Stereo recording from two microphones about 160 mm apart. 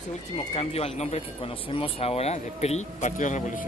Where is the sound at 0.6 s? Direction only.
40° left (ahead or behind).